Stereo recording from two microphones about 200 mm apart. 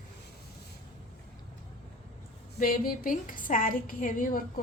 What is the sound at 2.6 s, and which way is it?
A woman's voice, 45° left (ahead or behind).